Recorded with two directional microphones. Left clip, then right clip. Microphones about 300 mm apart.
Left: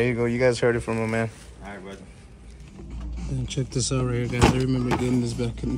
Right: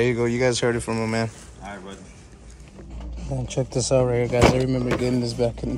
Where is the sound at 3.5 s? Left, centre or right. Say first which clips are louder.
Right 8 dB; centre.